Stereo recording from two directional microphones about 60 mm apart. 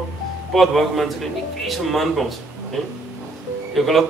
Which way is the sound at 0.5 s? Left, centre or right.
Centre.